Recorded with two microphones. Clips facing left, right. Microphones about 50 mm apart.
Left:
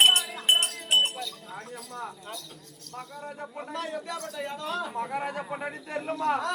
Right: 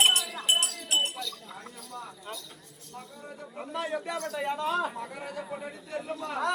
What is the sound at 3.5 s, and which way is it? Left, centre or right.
Speech, centre.